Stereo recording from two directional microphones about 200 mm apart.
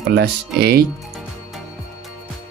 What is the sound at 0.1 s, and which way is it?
Speech, 50° right (ahead or behind).